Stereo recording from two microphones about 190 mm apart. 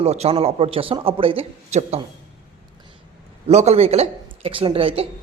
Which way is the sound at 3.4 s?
35° right (ahead or behind).